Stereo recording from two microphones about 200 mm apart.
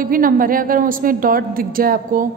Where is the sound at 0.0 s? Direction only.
45° right (ahead or behind).